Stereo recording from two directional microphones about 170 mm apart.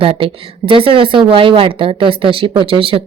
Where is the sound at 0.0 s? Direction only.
35° right (ahead or behind).